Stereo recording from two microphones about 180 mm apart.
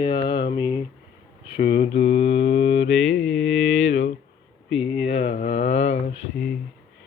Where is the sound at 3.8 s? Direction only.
80° left.